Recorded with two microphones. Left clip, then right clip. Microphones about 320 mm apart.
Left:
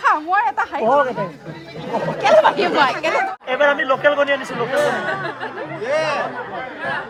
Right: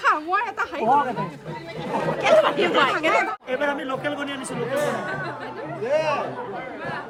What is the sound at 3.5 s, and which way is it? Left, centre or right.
Speech, centre.